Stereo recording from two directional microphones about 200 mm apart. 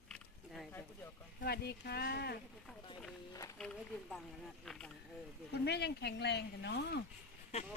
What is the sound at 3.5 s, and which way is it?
Speech, 5° left (ahead or behind).